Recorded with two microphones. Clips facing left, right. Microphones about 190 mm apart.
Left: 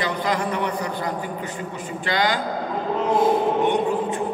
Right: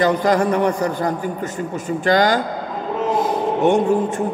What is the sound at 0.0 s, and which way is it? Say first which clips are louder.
A man's voice: right 8 dB; 45° right (ahead or behind).